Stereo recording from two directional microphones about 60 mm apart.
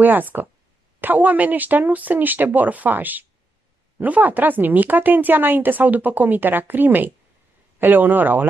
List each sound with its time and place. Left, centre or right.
0.0 s speech: right